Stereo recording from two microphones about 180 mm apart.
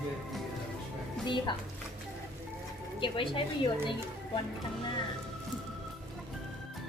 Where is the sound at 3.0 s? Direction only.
30° left (ahead or behind).